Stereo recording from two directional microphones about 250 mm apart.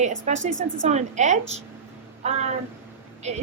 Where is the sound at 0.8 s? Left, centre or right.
Right.